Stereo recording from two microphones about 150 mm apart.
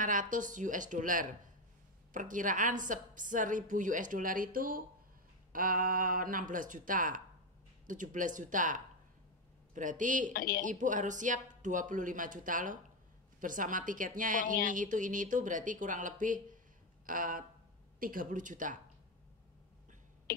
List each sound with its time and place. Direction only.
0.0 s a woman's voice: 60° right (ahead or behind)
10.3 s a woman's voice: 80° left
10.6 s a woman's voice: 60° right (ahead or behind)